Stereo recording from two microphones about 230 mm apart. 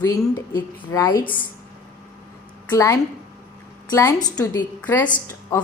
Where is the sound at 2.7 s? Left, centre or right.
Centre.